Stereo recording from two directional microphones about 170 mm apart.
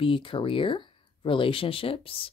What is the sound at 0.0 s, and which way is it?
Speech, 30° left (ahead or behind).